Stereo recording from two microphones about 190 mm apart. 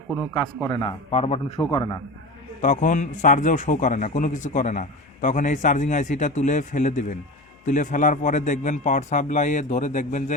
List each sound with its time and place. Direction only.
0.6 s a man's voice: 25° left (ahead or behind)
1.7 s a man's voice: 25° left (ahead or behind)
2.6 s a man's voice: 40° left (ahead or behind)